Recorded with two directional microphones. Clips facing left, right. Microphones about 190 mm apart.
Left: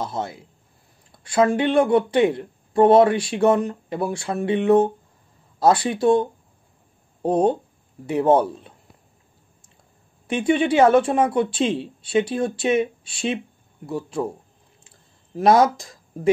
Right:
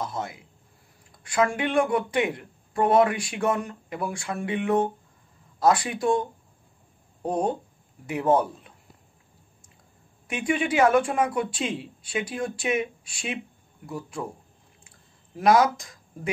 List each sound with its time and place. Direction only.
0.0 s speech: 30° left (ahead or behind)
7.2 s speech: 30° left (ahead or behind)
10.2 s speech: 30° left (ahead or behind)
15.3 s speech: 30° left (ahead or behind)